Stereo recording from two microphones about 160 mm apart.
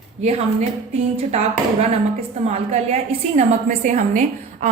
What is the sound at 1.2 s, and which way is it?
Speech, 40° right (ahead or behind).